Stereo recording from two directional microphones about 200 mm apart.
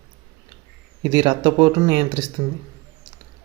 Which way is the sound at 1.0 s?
25° right (ahead or behind).